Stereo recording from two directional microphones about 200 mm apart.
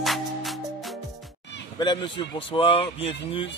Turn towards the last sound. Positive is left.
turn(degrees=25)  # may be behind; listen again after turning